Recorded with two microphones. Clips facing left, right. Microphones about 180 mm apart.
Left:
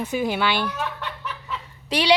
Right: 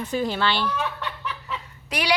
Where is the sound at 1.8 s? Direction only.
30° left (ahead or behind).